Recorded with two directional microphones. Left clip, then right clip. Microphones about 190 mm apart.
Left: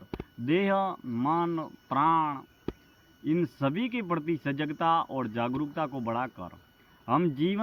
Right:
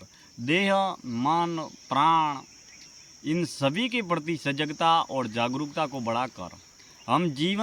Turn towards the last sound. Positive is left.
turn(degrees=-30)  # may be behind; listen again after turning